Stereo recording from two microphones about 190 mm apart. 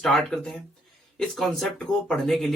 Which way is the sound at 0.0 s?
Centre (ahead or behind).